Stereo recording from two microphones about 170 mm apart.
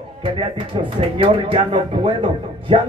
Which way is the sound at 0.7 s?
25° right (ahead or behind).